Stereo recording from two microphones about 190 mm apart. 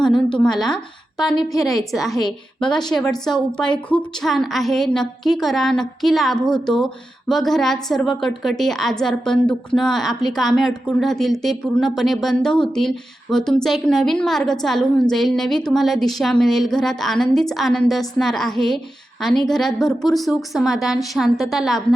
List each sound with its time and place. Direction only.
0.3 s a woman's voice: 5° left (ahead or behind)